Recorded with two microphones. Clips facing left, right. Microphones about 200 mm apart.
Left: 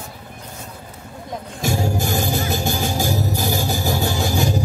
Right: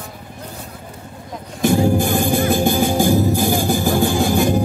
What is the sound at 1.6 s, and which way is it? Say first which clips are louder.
Music: right 7 dB; 55° right (ahead or behind).